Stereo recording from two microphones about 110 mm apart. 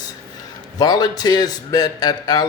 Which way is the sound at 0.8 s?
35° left (ahead or behind).